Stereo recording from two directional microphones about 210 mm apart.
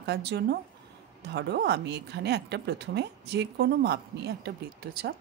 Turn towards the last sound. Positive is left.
turn(degrees=-50)  # may be behind; listen again after turning